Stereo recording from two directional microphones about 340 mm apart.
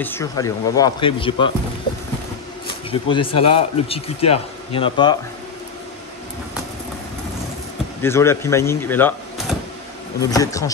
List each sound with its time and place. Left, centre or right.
0.0 s speech: centre
2.9 s speech: centre
8.0 s speech: centre